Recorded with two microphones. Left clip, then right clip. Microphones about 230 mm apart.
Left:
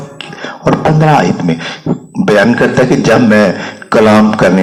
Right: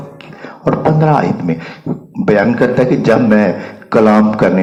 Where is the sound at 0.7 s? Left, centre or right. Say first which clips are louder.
Left 3 dB; left.